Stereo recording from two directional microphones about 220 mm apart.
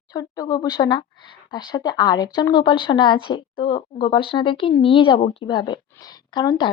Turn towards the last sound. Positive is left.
turn(degrees=20)  # may be behind; listen again after turning